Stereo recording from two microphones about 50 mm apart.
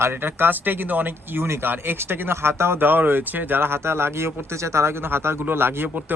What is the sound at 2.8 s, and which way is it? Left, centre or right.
Speech, right.